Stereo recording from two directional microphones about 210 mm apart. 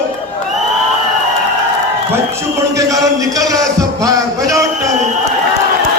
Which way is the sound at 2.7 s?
15° right (ahead or behind).